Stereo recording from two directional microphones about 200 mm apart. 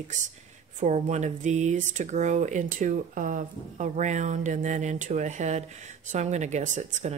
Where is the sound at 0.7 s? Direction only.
35° right (ahead or behind).